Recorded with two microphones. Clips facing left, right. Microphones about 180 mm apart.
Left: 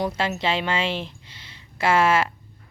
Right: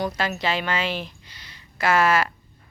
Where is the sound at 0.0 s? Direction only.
25° left (ahead or behind).